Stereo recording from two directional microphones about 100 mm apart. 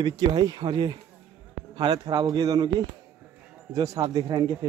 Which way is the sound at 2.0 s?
45° right (ahead or behind).